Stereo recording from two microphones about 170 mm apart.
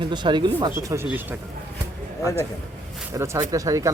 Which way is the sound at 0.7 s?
15° right (ahead or behind).